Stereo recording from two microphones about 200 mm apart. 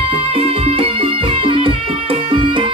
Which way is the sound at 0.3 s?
30° right (ahead or behind).